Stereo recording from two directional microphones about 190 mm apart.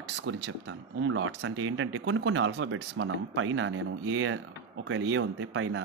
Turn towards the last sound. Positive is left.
turn(degrees=-85)